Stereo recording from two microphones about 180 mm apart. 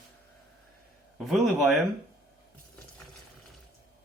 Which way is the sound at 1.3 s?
Centre (ahead or behind).